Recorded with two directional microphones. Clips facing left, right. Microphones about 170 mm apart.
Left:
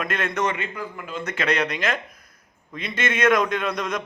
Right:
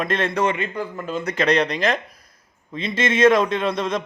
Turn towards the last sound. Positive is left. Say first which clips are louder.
# right 4 dB
turn(degrees=-30)  # may be behind; listen again after turning